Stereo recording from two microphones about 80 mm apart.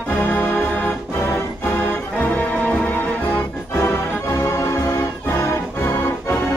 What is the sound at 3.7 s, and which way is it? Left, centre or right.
Music, left.